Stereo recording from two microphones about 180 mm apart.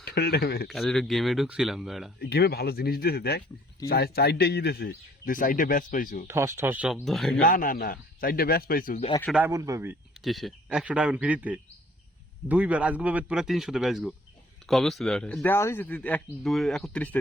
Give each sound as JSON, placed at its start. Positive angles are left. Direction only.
{"t": 0.0, "sound": "speech", "side_deg": 60}
{"t": 0.7, "sound": "a man's voice", "side_deg": 0}
{"t": 2.1, "sound": "speech", "side_deg": 65}
{"t": 6.2, "sound": "speech", "side_deg": -15}
{"t": 7.4, "sound": "speech", "side_deg": 50}
{"t": 9.3, "sound": "speech", "side_deg": -15}
{"t": 10.2, "sound": "a man's voice", "side_deg": 0}
{"t": 15.4, "sound": "speech", "side_deg": 15}